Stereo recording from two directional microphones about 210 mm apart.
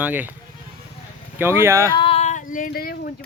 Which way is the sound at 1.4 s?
10° right (ahead or behind).